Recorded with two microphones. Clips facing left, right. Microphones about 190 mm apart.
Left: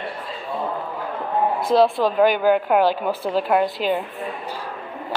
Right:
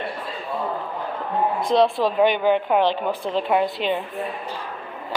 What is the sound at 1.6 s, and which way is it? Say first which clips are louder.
A woman's voice: left 1 dB; 5° left (ahead or behind).